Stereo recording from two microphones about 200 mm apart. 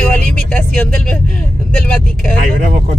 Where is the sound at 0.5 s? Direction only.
5° left (ahead or behind).